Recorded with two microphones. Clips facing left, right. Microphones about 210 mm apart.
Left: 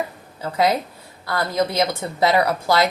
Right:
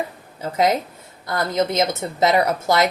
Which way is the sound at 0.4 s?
20° right (ahead or behind).